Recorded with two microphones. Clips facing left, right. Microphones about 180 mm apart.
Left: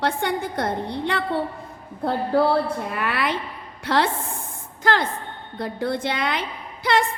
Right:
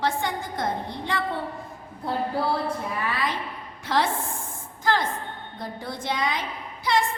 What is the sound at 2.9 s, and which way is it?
A woman's voice, 70° left (ahead or behind).